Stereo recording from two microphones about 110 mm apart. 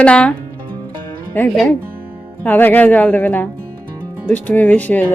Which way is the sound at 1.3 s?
15° left (ahead or behind).